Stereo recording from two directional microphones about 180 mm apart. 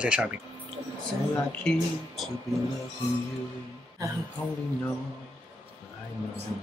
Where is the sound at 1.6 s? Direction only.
Centre (ahead or behind).